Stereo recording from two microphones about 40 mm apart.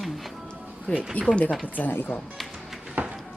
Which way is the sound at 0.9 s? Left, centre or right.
Left.